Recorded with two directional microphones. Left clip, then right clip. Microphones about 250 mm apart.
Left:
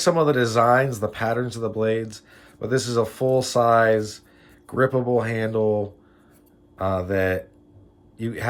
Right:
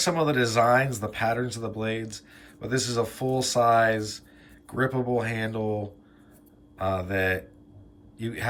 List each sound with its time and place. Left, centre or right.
0.0 s speech: centre